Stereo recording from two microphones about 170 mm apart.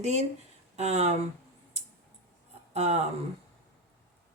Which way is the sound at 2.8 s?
40° right (ahead or behind).